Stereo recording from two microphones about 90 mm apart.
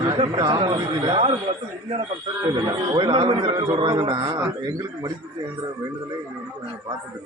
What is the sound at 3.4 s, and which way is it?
Speech, 50° right (ahead or behind).